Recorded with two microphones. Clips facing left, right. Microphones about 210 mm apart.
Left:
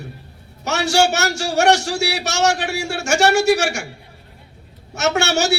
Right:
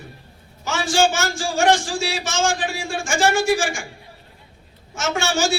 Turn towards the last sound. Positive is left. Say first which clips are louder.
# left 3 dB
turn(degrees=70)  # may be behind; listen again after turning